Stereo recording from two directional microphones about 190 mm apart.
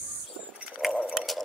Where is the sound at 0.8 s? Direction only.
Centre (ahead or behind).